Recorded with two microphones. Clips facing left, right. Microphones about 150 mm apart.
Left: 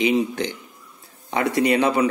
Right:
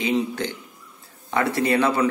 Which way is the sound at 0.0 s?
15° left (ahead or behind).